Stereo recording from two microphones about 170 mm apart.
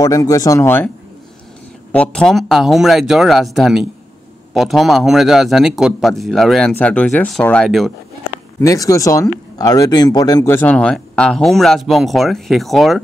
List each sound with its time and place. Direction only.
0.0 s speech: 20° left (ahead or behind); by 7.9 s 5° left (ahead or behind)
8.5 s speech: 20° left (ahead or behind); by 13.0 s centre (ahead or behind)